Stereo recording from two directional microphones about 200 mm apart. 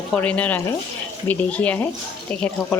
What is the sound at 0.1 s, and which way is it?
A woman's voice, 5° left (ahead or behind).